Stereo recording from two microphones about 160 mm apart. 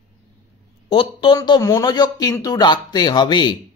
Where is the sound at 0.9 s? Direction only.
35° left (ahead or behind).